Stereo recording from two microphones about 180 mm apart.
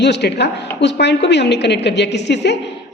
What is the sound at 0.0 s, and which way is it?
A woman's voice, 70° left (ahead or behind).